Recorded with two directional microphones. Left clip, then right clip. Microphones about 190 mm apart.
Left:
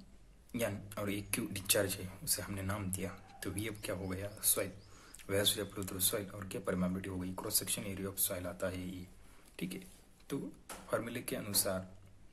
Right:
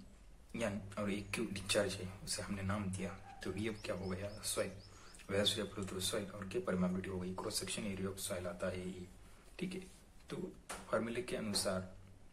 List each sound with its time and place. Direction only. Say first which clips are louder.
0.5 s speech: left 3 dB; 45° left (ahead or behind)
10.3 s speech: left 3 dB; 45° left (ahead or behind)